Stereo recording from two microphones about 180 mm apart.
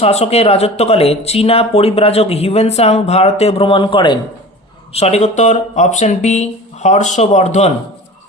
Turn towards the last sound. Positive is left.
turn(degrees=40)  # may be behind; listen again after turning